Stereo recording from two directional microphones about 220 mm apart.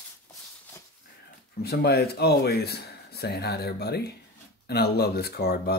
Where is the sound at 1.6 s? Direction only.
45° left (ahead or behind).